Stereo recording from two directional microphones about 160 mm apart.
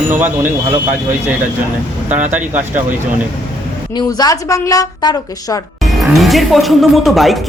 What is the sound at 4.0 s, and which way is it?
A woman's voice, 25° left (ahead or behind).